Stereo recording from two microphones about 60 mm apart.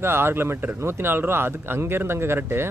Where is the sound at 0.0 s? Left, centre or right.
Right.